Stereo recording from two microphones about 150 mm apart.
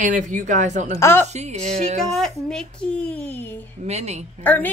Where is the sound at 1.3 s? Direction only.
50° right (ahead or behind).